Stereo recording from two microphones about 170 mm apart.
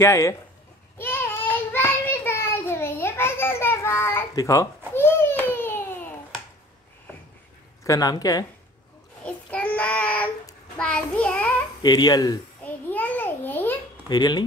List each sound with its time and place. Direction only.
0.0 s speech: 15° left (ahead or behind)
0.9 s child singing: 15° left (ahead or behind)
7.8 s speech: 20° left (ahead or behind)
9.2 s child singing: 5° left (ahead or behind)
11.8 s speech: 25° left (ahead or behind)
12.6 s a sound: 10° left (ahead or behind)
14.0 s speech: 25° left (ahead or behind)